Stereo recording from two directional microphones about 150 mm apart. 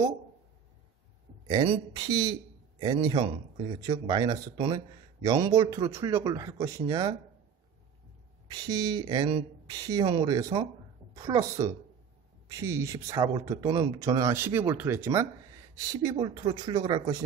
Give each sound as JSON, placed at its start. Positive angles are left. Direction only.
{"t": 1.5, "sound": "speech", "side_deg": -30}
{"t": 8.5, "sound": "speech", "side_deg": -30}